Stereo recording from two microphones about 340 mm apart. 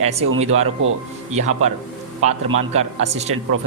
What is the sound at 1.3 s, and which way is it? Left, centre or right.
Speech, centre.